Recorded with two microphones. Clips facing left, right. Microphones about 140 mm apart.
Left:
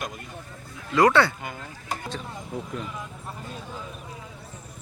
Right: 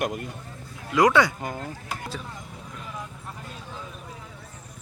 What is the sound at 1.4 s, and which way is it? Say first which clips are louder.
Speech: right 4 dB; 40° right (ahead or behind).